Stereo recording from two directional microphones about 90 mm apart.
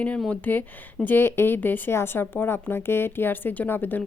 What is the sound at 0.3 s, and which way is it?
A woman's voice, 20° left (ahead or behind).